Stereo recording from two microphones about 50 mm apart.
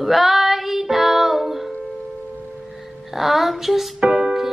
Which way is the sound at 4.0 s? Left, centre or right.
Centre.